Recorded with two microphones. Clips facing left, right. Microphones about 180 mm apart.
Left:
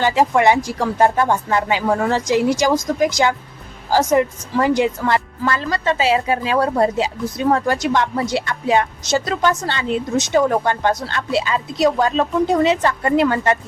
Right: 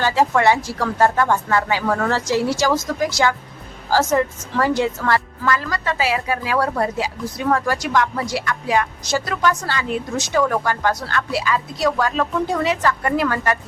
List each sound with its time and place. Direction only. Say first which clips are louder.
0.0 s a woman's voice: left 2 dB; 20° left (ahead or behind)